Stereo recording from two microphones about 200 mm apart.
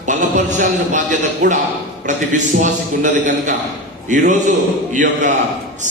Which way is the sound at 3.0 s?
40° right (ahead or behind).